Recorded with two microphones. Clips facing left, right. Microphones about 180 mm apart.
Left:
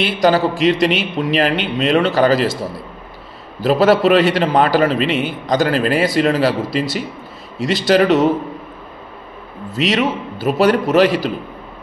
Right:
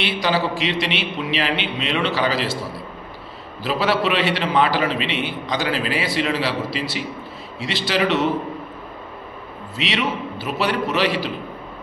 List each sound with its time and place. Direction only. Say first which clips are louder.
0.0 s a man's voice: left 7 dB; 45° left (ahead or behind)
3.6 s a man's voice: left 8 dB; 45° left (ahead or behind)
9.8 s a man's voice: left 6 dB; 45° left (ahead or behind)